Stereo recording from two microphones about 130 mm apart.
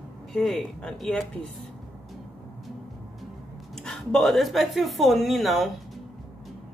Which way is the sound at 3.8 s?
Centre (ahead or behind).